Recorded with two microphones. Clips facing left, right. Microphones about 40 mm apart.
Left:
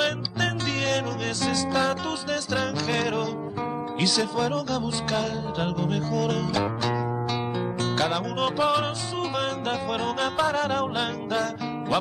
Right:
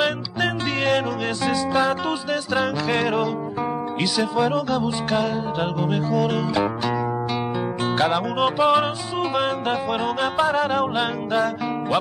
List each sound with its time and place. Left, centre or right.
0.0 s music: centre